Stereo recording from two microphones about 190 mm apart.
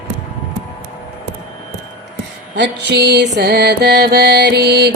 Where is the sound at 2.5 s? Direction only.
65° right (ahead or behind).